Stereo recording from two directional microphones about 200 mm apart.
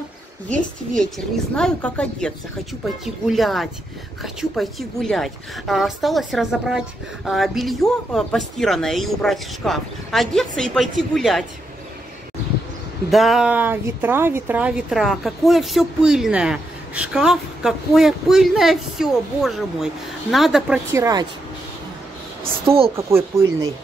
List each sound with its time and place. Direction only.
1.5 s a woman's voice: 5° left (ahead or behind)
13.1 s a woman's voice: centre (ahead or behind)
20.9 s speech: 15° right (ahead or behind)
22.4 s a woman's voice: 25° right (ahead or behind)
22.9 s speech: 15° right (ahead or behind)